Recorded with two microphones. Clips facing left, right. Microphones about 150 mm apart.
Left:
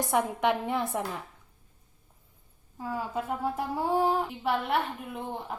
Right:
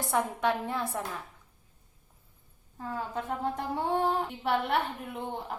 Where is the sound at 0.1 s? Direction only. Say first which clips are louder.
Left 1 dB; 20° left (ahead or behind).